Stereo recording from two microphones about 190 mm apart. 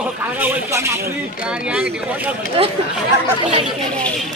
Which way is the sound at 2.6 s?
30° right (ahead or behind).